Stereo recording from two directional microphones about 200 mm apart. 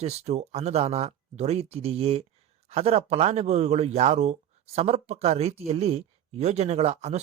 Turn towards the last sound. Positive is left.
turn(degrees=-35)  # may be behind; listen again after turning